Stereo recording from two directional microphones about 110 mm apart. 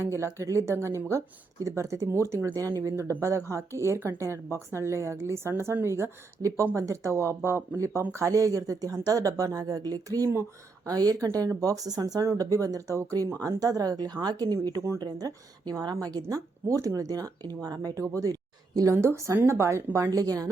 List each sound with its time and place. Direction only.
0.0 s a woman's voice: 25° right (ahead or behind)
18.1 s a sound: 35° right (ahead or behind)
18.9 s a woman's voice: 25° right (ahead or behind)